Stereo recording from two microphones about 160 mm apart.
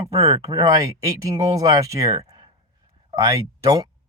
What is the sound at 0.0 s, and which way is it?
Speech, 40° right (ahead or behind).